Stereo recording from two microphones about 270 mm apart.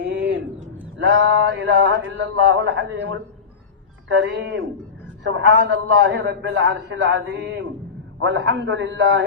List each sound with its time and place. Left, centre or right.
0.0 s a sound: right
0.9 s a man's voice: right
4.2 s a man's voice: right